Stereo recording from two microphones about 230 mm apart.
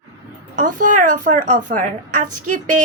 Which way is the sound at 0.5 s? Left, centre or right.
Right.